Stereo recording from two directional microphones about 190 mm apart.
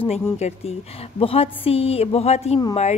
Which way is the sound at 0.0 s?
35° left (ahead or behind).